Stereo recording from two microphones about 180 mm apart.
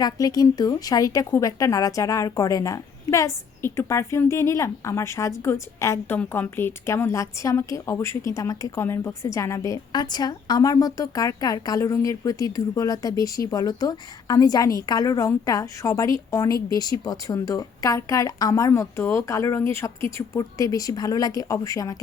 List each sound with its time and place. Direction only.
0.0 s a woman's voice: 20° left (ahead or behind)